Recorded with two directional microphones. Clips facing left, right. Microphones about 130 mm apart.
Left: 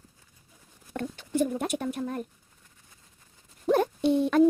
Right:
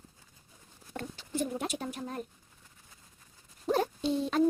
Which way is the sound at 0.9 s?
55° left (ahead or behind).